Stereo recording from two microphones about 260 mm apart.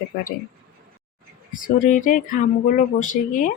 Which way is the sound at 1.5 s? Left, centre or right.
Left.